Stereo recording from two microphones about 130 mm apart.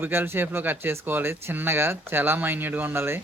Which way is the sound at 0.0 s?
15° right (ahead or behind).